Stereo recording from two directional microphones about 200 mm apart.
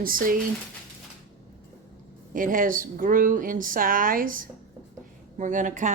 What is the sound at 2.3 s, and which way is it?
Speech, 45° right (ahead or behind).